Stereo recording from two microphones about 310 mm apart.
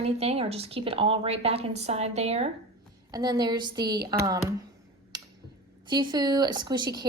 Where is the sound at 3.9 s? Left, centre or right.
Right.